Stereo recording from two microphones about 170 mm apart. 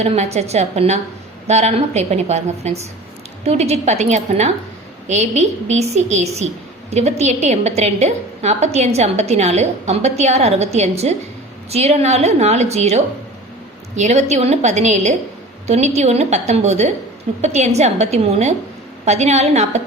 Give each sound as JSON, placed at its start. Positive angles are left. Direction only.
{"t": 0.0, "sound": "a woman's voice", "side_deg": -40}